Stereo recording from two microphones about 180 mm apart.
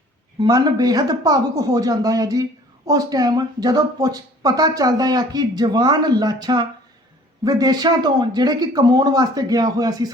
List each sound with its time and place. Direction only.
0.3 s speech: 20° right (ahead or behind)